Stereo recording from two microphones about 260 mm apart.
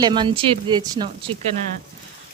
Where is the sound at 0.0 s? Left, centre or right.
Centre.